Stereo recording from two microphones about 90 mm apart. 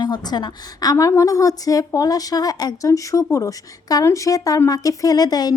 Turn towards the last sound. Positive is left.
turn(degrees=45)  # may be behind; listen again after turning